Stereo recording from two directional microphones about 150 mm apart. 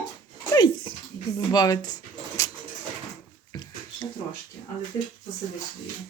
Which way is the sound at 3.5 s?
30° left (ahead or behind).